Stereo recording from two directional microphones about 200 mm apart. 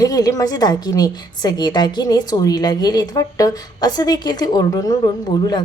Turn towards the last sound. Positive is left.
turn(degrees=20)  # may be behind; listen again after turning